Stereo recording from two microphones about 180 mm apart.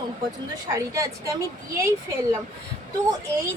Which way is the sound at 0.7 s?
20° right (ahead or behind).